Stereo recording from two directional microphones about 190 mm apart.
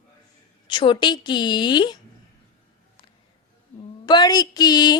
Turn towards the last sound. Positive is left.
turn(degrees=20)  # may be behind; listen again after turning